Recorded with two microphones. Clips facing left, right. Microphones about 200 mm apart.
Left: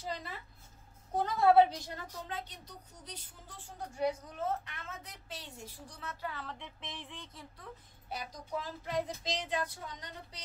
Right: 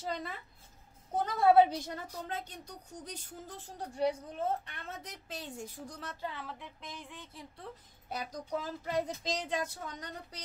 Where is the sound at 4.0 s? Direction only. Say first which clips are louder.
Right 2 dB; 30° right (ahead or behind).